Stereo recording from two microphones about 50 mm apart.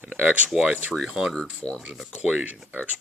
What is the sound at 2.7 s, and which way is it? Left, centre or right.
Speech, right.